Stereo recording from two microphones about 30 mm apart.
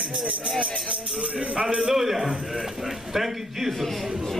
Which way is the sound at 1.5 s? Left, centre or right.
Right.